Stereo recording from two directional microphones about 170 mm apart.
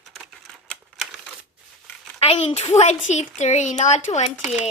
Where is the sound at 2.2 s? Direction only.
40° left (ahead or behind).